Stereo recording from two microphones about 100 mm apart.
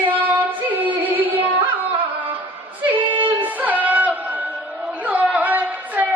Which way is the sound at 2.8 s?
55° right (ahead or behind).